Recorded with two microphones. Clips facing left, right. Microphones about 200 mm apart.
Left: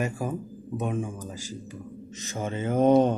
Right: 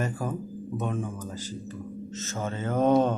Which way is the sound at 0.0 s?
10° left (ahead or behind).